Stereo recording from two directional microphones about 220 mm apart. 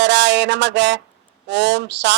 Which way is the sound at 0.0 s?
50° right (ahead or behind).